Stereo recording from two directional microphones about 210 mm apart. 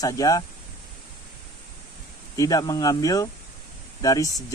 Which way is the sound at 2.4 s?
15° left (ahead or behind).